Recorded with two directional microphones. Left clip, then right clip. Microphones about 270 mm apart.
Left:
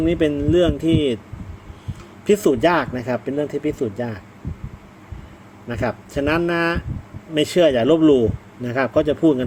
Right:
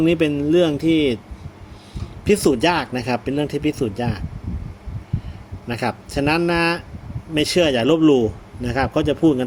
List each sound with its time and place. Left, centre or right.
0.0 s a man's voice: centre
2.2 s a man's voice: centre
5.6 s a man's voice: centre